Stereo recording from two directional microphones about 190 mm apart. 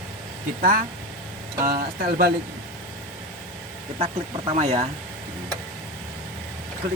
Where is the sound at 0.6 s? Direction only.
50° right (ahead or behind).